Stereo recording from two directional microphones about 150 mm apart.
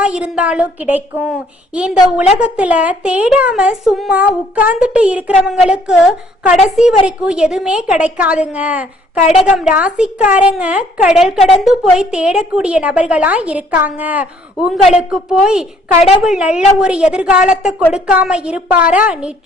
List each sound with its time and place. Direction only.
0.0 s a woman's voice: 5° right (ahead or behind)